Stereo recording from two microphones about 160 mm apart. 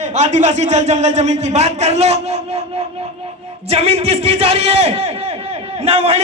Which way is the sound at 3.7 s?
40° right (ahead or behind).